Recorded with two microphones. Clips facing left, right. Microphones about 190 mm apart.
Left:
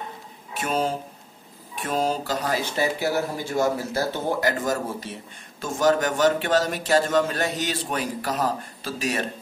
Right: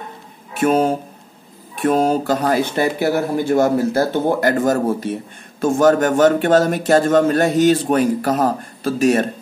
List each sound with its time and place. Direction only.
0.6 s speech: 50° right (ahead or behind)